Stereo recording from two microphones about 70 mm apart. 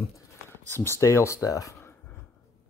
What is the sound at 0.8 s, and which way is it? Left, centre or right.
Speech, left.